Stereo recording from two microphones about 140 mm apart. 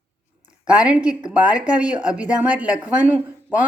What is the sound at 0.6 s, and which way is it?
Speech, 10° right (ahead or behind).